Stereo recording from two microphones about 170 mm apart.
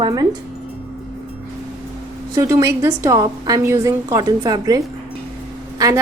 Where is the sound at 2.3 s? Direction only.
20° right (ahead or behind).